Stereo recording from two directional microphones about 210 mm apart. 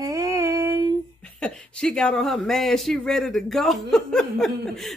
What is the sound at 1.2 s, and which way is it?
Speech, 5° left (ahead or behind).